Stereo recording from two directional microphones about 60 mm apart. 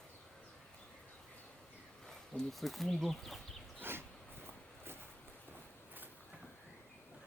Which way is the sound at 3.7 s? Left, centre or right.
Right.